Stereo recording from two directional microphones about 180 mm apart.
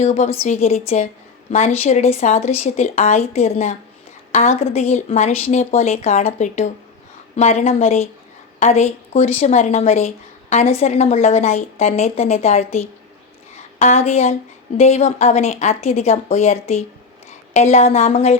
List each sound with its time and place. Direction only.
0.0 s a woman's voice: 35° left (ahead or behind)